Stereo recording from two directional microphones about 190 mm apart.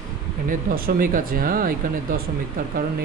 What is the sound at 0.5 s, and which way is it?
Speech, 50° right (ahead or behind).